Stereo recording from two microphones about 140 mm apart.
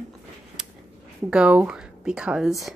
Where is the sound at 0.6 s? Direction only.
5° right (ahead or behind).